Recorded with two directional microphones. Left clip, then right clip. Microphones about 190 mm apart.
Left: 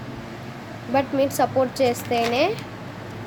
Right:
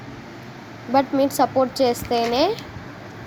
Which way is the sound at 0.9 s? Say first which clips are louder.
Right 2 dB; 20° right (ahead or behind).